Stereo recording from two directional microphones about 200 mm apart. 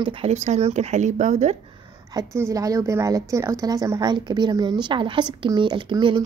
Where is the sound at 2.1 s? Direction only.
15° right (ahead or behind).